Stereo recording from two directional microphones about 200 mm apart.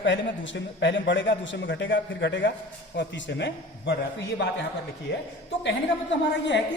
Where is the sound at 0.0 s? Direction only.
65° left (ahead or behind).